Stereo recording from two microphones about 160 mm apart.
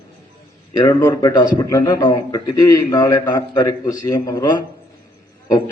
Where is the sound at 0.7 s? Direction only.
20° left (ahead or behind).